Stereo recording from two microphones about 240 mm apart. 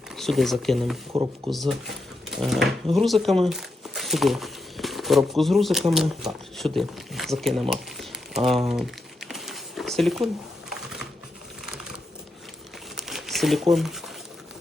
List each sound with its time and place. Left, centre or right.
0.2 s speech: centre
1.1 s speech: right
1.5 s speech: centre
6.7 s a sound: centre
8.4 s crumpling: centre
13.0 s crumpling: centre